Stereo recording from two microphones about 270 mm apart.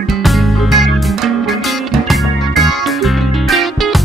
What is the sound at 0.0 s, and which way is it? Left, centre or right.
Music, centre.